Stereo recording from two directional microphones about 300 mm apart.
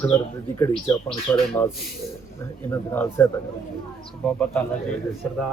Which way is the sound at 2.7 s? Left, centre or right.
Centre.